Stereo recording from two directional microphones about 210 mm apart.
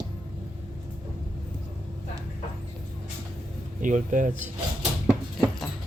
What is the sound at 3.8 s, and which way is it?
Speech, 40° right (ahead or behind).